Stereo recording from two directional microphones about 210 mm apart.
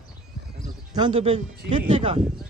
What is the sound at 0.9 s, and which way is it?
Speech, 25° right (ahead or behind).